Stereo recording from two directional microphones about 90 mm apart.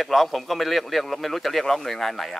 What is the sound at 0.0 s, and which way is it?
A man's voice, centre (ahead or behind).